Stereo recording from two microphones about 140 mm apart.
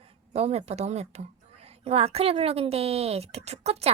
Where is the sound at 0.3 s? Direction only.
50° right (ahead or behind).